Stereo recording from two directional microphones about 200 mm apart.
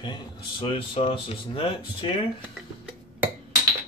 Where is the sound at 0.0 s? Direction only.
25° left (ahead or behind).